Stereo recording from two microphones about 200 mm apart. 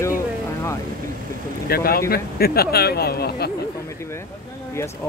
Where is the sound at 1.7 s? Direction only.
50° left (ahead or behind).